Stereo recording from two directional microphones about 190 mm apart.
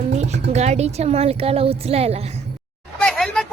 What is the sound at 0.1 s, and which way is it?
Music, 35° right (ahead or behind).